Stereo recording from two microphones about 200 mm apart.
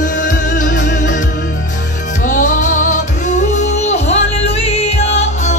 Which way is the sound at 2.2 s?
40° left (ahead or behind).